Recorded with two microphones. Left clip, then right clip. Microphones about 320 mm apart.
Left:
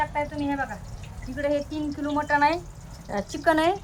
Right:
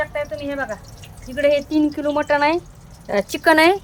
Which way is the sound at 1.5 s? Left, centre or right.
Right.